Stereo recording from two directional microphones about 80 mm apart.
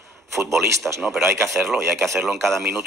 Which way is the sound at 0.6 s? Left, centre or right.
Centre.